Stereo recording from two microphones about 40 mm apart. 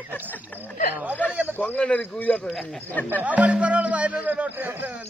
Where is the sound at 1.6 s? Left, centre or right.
Left.